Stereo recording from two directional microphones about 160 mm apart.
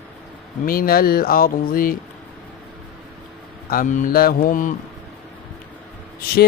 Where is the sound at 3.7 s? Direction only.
55° left (ahead or behind).